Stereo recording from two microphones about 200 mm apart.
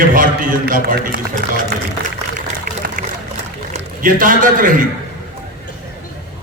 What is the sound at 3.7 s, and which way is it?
A man's voice, 40° right (ahead or behind).